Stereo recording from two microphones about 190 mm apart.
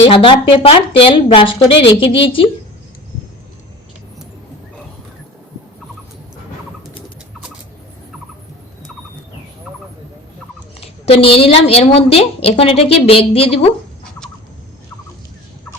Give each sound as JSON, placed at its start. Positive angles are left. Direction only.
{"t": 0.0, "sound": "a woman's voice", "side_deg": 30}
{"t": 10.8, "sound": "a woman's voice", "side_deg": 30}